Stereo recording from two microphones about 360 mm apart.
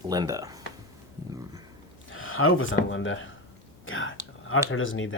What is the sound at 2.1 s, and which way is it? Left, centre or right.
Speech, left.